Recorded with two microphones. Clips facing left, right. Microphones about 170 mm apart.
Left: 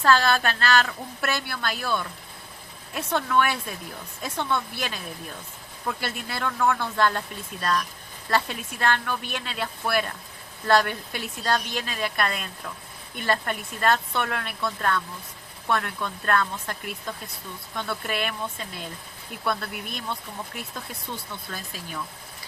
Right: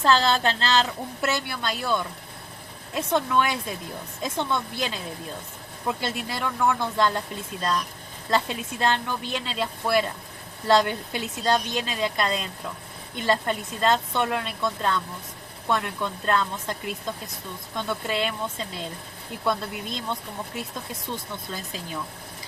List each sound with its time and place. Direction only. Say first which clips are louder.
0.0 s a woman's voice: even; 20° right (ahead or behind)
8.3 s a woman's voice: right 1 dB; 20° right (ahead or behind)
21.5 s a woman's voice: right 2 dB; 20° right (ahead or behind)